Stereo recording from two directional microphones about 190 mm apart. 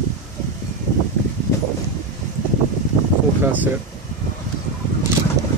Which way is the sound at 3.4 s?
10° right (ahead or behind).